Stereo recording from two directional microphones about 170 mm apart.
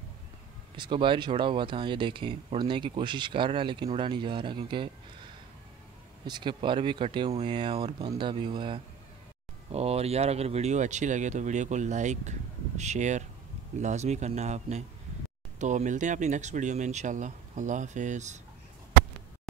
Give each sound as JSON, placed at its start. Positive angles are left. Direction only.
{"t": 0.7, "sound": "speech", "side_deg": -30}
{"t": 6.2, "sound": "a man's voice", "side_deg": -30}